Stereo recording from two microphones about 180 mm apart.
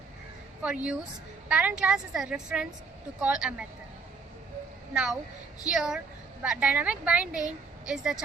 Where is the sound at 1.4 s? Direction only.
5° right (ahead or behind).